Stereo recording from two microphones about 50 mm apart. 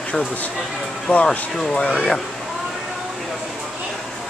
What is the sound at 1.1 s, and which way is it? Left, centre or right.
Speech, left.